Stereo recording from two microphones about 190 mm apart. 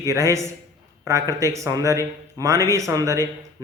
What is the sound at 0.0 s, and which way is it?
A man's voice, 15° right (ahead or behind).